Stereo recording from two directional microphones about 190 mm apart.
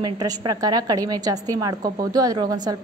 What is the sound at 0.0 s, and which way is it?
A woman's voice, 20° right (ahead or behind).